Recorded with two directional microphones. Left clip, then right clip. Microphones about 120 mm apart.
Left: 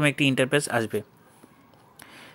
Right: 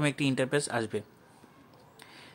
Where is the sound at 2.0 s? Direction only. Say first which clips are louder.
Left 5 dB; 25° left (ahead or behind).